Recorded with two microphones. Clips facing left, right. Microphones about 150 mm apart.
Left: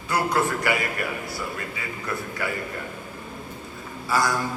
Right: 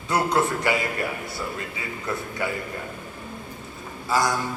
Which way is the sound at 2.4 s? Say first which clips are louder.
Right 2 dB; 20° right (ahead or behind).